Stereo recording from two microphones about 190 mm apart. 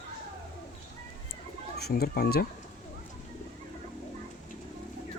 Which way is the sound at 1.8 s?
55° left (ahead or behind).